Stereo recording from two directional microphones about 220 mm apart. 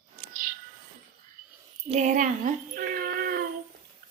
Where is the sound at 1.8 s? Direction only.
30° right (ahead or behind).